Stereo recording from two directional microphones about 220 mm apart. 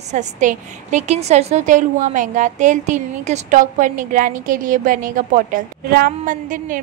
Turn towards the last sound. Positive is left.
turn(degrees=-35)  # may be behind; listen again after turning